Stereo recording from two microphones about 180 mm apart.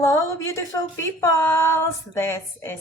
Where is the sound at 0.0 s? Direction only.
20° left (ahead or behind).